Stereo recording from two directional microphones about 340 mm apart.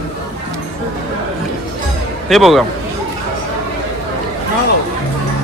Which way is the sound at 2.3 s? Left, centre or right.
Centre.